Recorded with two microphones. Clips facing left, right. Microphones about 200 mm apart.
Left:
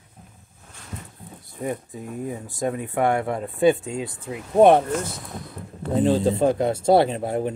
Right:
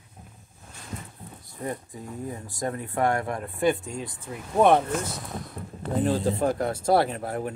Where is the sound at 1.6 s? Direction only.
20° left (ahead or behind).